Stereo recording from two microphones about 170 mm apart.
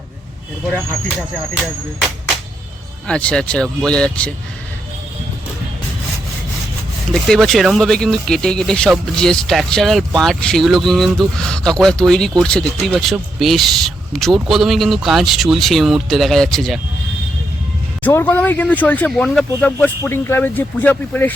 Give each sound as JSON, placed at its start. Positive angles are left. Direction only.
{"t": 3.1, "sound": "speech", "side_deg": 5}
{"t": 7.1, "sound": "speech", "side_deg": 0}
{"t": 18.0, "sound": "speech", "side_deg": 10}